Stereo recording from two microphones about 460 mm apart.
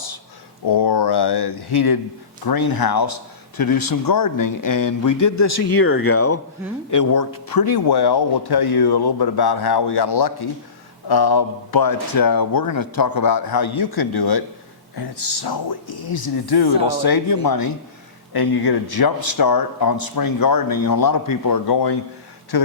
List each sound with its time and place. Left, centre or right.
0.7 s a man's voice: left
6.9 s a man's voice: left